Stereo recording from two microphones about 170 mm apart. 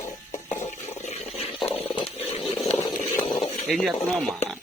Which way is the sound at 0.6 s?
45° left (ahead or behind).